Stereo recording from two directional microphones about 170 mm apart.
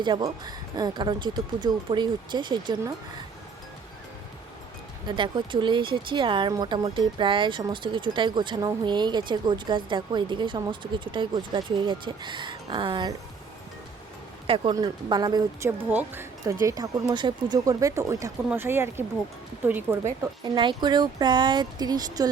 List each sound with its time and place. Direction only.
0.0 s speech: 25° right (ahead or behind)
5.0 s speech: 30° right (ahead or behind)
14.4 s speech: 30° right (ahead or behind)
15.9 s speech: 10° right (ahead or behind)
16.6 s speech: 25° right (ahead or behind)
20.6 s speech: 25° right (ahead or behind)